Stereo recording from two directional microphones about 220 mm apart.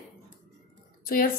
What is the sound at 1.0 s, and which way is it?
Speech, 40° left (ahead or behind).